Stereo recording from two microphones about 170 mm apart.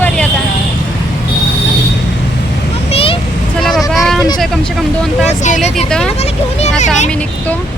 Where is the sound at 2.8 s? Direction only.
35° left (ahead or behind).